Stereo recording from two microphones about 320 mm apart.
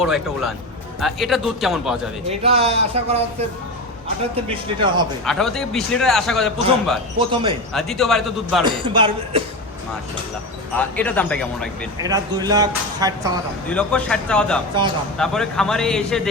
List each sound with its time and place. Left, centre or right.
0.0 s a man's voice: centre
2.4 s speech: centre
4.4 s speech: centre
5.2 s a man's voice: centre
7.2 s speech: centre
7.7 s a man's voice: centre
8.6 s speech: centre
10.8 s a man's voice: centre
12.0 s speech: centre
13.7 s a man's voice: centre